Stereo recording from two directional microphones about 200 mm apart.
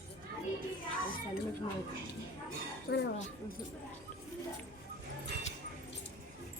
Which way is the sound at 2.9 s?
55° left (ahead or behind).